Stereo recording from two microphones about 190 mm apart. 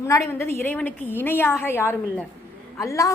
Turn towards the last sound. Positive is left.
turn(degrees=15)  # may be behind; listen again after turning